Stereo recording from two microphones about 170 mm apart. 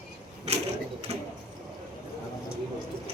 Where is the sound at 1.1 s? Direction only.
35° right (ahead or behind).